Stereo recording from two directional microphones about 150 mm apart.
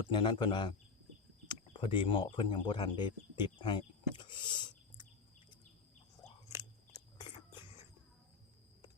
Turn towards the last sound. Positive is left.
turn(degrees=30)  # may be behind; listen again after turning